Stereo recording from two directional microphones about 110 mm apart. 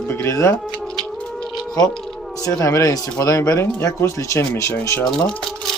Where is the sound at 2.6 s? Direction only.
30° left (ahead or behind).